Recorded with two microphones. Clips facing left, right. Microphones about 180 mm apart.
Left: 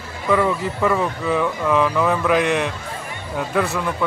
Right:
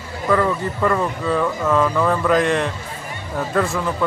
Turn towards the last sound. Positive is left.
turn(degrees=0)  # may be behind; listen again after turning